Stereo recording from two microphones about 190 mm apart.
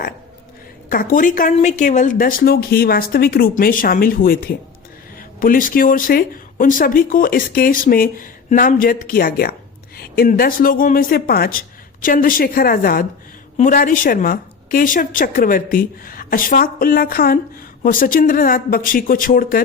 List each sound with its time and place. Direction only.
0.9 s speech: 45° left (ahead or behind)